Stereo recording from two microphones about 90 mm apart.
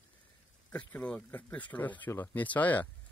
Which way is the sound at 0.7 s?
15° left (ahead or behind).